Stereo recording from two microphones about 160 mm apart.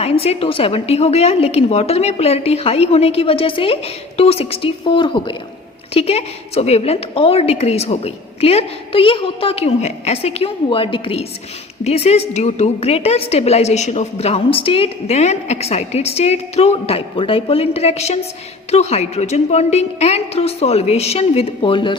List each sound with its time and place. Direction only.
0.0 s a woman's voice: 40° left (ahead or behind)